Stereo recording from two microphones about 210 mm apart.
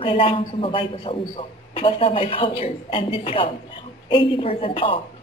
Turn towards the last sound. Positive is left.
turn(degrees=25)  # may be behind; listen again after turning